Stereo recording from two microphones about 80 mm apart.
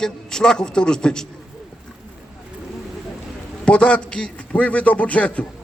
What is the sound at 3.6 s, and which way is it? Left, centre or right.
A man's voice, centre.